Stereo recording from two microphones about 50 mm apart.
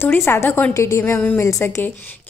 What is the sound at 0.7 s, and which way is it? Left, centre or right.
Speech, left.